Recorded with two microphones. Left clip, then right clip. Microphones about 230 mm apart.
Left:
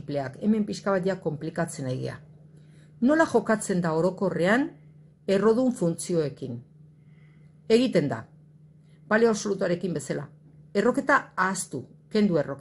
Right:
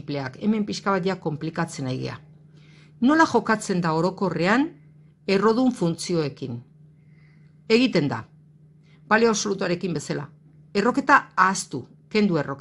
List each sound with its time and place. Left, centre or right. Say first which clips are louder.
0.0 s speech: right 1 dB; right
7.6 s a woman's voice: right 2 dB; right